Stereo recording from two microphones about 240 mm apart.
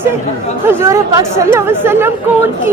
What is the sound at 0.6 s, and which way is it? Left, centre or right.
A woman's voice, centre.